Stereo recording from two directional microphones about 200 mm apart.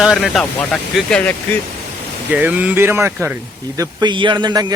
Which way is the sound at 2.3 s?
5° right (ahead or behind).